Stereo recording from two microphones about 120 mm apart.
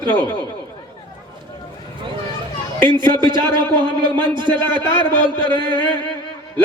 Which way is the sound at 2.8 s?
40° right (ahead or behind).